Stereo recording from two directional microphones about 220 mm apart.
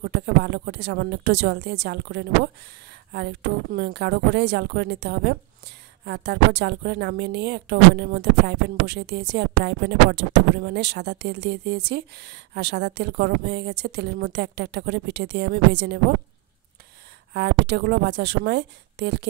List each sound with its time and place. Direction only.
0.0 s speech: 50° right (ahead or behind)
17.3 s speech: 50° right (ahead or behind)